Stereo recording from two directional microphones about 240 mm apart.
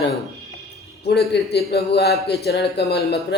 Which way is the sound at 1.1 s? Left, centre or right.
Left.